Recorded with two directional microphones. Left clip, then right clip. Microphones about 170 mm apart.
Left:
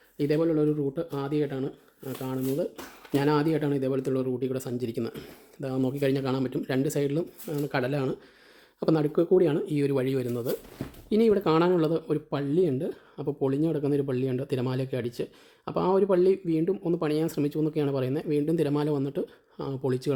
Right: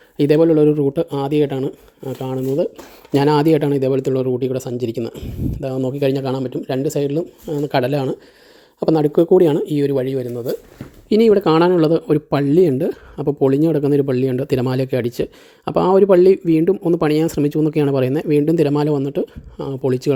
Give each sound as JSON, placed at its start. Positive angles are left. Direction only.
{"t": 0.2, "sound": "speech", "side_deg": -50}
{"t": 6.4, "sound": "speech", "side_deg": -10}
{"t": 7.7, "sound": "speech", "side_deg": -30}
{"t": 11.1, "sound": "speech", "side_deg": -35}